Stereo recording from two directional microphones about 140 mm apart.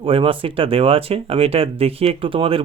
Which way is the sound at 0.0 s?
40° right (ahead or behind).